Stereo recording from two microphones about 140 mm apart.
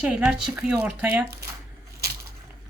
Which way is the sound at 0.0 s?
5° right (ahead or behind).